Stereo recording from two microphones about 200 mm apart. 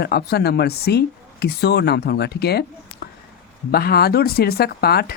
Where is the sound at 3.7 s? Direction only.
50° left (ahead or behind).